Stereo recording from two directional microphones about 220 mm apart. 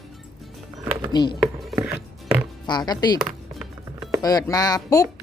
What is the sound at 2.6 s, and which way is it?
Speech, 20° left (ahead or behind).